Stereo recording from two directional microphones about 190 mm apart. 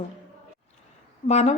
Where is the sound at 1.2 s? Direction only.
35° left (ahead or behind).